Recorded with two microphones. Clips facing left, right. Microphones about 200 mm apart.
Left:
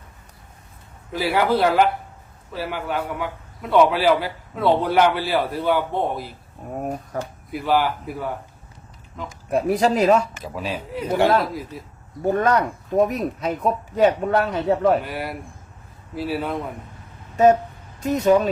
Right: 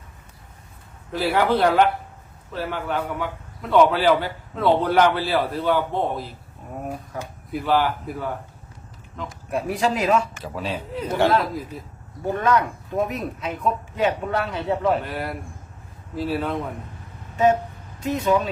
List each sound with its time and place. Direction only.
1.1 s a man's voice: 10° left (ahead or behind)
7.5 s a man's voice: 10° left (ahead or behind)
9.5 s a man's voice: 40° left (ahead or behind)
10.4 s a man's voice: 10° left (ahead or behind)
12.3 s a man's voice: 40° left (ahead or behind)
15.0 s a man's voice: 5° left (ahead or behind)
17.3 s vehicle: 40° left (ahead or behind)
18.0 s speech: 40° left (ahead or behind)